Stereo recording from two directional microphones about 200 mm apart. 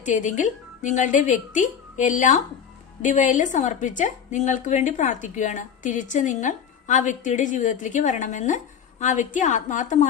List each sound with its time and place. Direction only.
0.0 s a woman's voice: 40° left (ahead or behind)